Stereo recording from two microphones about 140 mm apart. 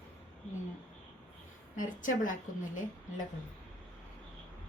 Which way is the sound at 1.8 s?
70° left (ahead or behind).